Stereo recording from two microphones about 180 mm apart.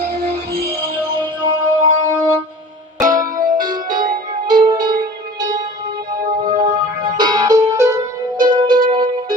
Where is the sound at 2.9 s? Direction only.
45° right (ahead or behind).